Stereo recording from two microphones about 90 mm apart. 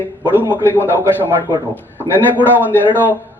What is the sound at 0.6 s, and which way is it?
Speech, 25° left (ahead or behind).